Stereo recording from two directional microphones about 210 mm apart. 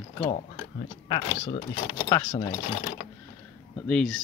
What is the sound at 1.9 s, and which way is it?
Speech, 15° left (ahead or behind).